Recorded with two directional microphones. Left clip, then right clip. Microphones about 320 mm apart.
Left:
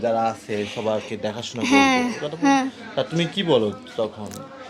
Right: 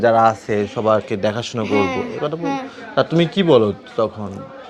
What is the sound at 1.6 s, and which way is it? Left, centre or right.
A woman's voice, left.